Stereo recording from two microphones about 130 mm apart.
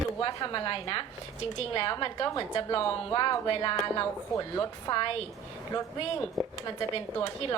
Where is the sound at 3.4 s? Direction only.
40° left (ahead or behind).